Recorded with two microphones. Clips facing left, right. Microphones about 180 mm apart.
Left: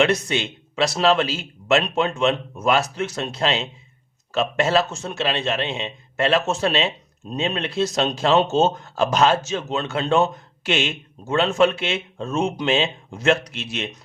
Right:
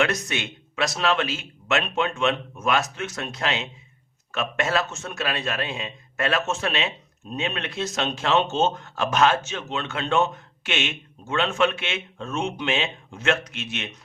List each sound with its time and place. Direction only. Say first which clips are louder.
0.0 s a man's voice: left 5 dB; 30° left (ahead or behind)